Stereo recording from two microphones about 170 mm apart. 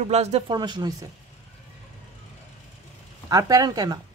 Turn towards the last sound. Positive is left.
turn(degrees=-20)  # may be behind; listen again after turning